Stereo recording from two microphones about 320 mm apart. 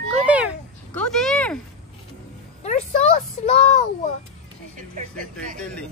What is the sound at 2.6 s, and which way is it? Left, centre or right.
Music, left.